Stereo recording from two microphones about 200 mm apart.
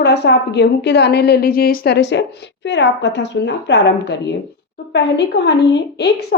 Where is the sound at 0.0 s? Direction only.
55° left (ahead or behind).